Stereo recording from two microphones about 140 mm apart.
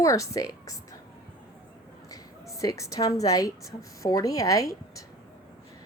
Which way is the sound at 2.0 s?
25° left (ahead or behind).